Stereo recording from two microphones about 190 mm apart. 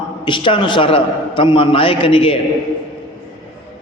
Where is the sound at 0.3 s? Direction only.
25° left (ahead or behind).